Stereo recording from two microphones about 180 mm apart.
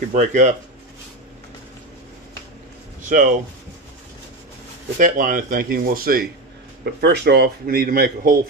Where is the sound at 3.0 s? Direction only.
50° right (ahead or behind).